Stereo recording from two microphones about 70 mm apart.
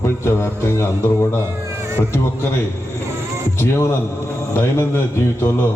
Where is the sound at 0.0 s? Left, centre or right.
Left.